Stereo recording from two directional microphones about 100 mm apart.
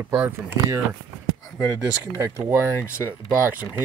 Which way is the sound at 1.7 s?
15° right (ahead or behind).